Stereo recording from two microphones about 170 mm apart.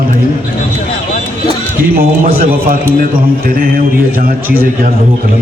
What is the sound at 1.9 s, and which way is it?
Speech, 60° right (ahead or behind).